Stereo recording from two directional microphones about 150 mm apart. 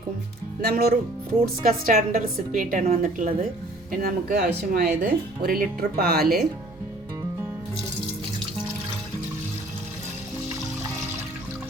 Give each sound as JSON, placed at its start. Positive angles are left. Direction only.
{"t": 0.6, "sound": "speech", "side_deg": -90}
{"t": 1.6, "sound": "a woman's voice", "side_deg": -60}
{"t": 3.9, "sound": "speech", "side_deg": -80}